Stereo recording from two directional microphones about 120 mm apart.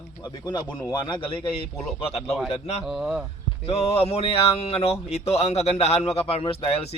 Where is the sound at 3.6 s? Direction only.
60° left (ahead or behind).